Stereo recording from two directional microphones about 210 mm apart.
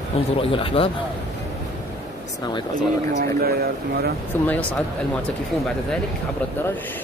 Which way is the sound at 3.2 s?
45° right (ahead or behind).